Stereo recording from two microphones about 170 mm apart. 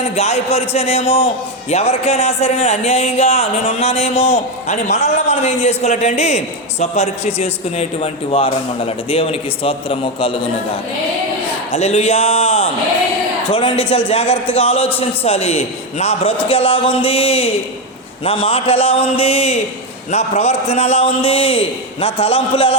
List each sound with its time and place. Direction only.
0.0 s a man's voice: 40° left (ahead or behind)
11.7 s a man's voice: 40° left (ahead or behind)